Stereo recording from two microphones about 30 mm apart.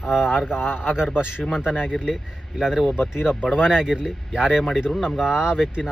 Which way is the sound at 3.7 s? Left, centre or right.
Right.